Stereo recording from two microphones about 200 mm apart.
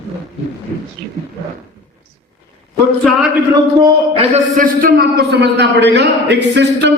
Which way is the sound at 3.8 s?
30° right (ahead or behind).